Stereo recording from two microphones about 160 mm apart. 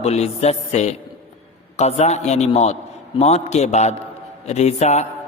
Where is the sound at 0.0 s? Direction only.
40° left (ahead or behind).